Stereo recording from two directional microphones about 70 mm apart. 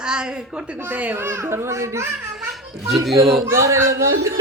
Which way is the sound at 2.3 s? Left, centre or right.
Centre.